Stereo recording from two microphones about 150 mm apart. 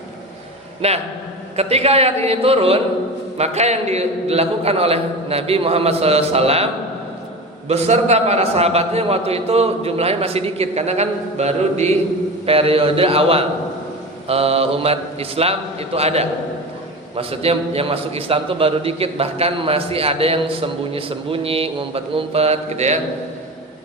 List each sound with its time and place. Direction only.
0.8 s a man's voice: 45° right (ahead or behind)
7.7 s a man's voice: 45° right (ahead or behind)